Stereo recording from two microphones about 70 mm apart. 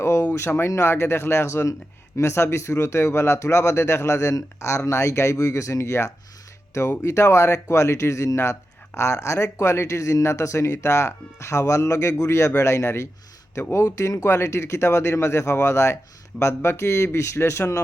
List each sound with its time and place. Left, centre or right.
0.0 s a sound: left
0.3 s speech: left
14.3 s speech: left